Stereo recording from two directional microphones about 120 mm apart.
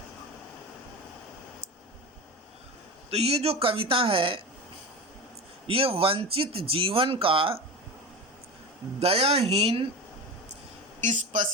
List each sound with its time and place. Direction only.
3.1 s speech: 60° right (ahead or behind)
5.6 s speech: 50° right (ahead or behind)
9.0 s speech: 60° right (ahead or behind)
11.0 s speech: 90° right